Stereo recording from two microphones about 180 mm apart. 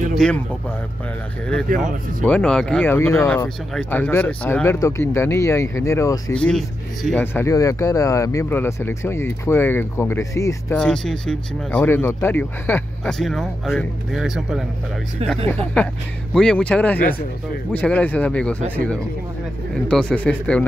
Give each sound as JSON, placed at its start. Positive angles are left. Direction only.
{"t": 0.1, "sound": "a sound", "side_deg": 5}
{"t": 1.7, "sound": "speech", "side_deg": -55}
{"t": 2.2, "sound": "speech", "side_deg": 5}
{"t": 6.3, "sound": "speech", "side_deg": 5}
{"t": 7.3, "sound": "speech", "side_deg": 15}
{"t": 10.8, "sound": "speech", "side_deg": 5}
{"t": 19.9, "sound": "speech", "side_deg": 5}